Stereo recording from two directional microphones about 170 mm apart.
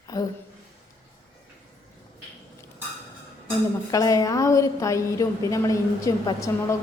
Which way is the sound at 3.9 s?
20° left (ahead or behind).